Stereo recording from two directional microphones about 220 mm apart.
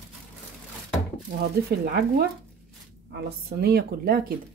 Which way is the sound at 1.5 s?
45° right (ahead or behind).